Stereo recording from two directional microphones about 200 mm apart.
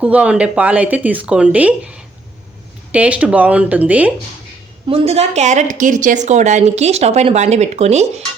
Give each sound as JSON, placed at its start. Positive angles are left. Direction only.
{"t": 0.0, "sound": "speech", "side_deg": -5}
{"t": 4.9, "sound": "a woman's voice", "side_deg": -30}